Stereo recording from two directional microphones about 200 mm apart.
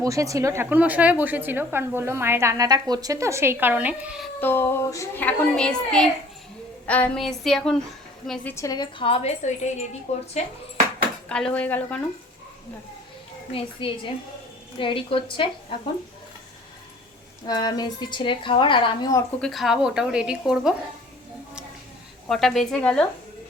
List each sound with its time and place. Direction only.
0.0 s a woman's voice: 15° right (ahead or behind)
4.4 s a woman's voice: 10° left (ahead or behind); by 10.2 s 35° left (ahead or behind)
11.3 s a woman's voice: 5° left (ahead or behind)
13.5 s a woman's voice: 25° left (ahead or behind)
17.4 s a woman's voice: 20° left (ahead or behind)
19.4 s a woman's voice: centre (ahead or behind)
22.3 s a woman's voice: centre (ahead or behind)